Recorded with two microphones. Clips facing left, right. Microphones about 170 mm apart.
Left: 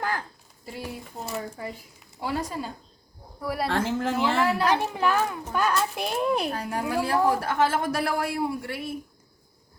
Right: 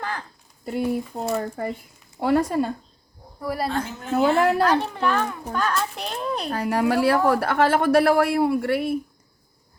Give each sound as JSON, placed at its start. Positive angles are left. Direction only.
{"t": 0.0, "sound": "a sound", "side_deg": 5}
{"t": 0.9, "sound": "speech", "side_deg": -60}
{"t": 3.4, "sound": "speech", "side_deg": 0}
{"t": 3.8, "sound": "speech", "side_deg": 90}
{"t": 4.4, "sound": "a woman's voice", "side_deg": -50}
{"t": 4.7, "sound": "a child's voice", "side_deg": 10}
{"t": 6.5, "sound": "a woman's voice", "side_deg": -75}